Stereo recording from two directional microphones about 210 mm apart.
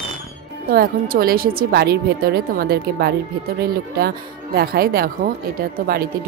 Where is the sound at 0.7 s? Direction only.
45° right (ahead or behind).